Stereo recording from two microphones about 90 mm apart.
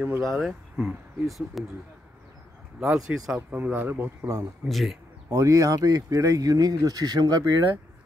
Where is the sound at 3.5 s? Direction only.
20° right (ahead or behind).